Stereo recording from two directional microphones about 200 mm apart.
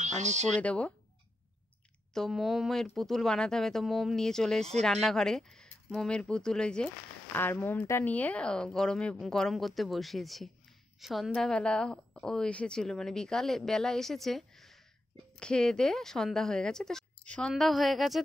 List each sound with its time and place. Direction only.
0.0 s speech: 35° right (ahead or behind)
0.6 s speech: 5° left (ahead or behind)
2.1 s a woman's voice: centre (ahead or behind)